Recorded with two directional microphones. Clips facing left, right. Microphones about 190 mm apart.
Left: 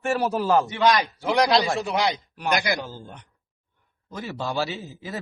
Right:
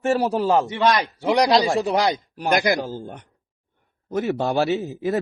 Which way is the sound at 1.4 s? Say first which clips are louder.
Right 3 dB; 35° right (ahead or behind).